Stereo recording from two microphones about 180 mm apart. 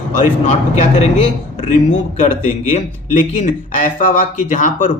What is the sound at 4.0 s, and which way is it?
Speech, 45° left (ahead or behind).